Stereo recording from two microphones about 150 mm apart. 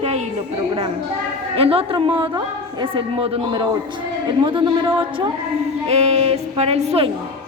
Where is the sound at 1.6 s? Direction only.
40° right (ahead or behind).